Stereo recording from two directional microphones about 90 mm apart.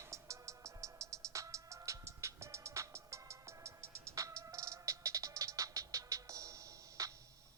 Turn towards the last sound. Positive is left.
turn(degrees=-35)  # may be behind; listen again after turning